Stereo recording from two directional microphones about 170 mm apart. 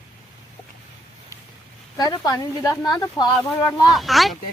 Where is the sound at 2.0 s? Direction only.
20° left (ahead or behind).